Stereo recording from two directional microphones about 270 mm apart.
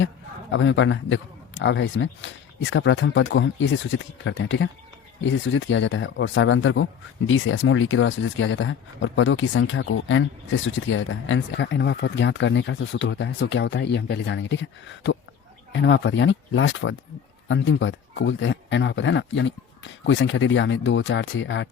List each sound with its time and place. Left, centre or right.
0.5 s speech: left